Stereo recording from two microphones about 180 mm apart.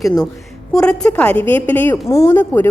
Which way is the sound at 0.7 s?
5° left (ahead or behind).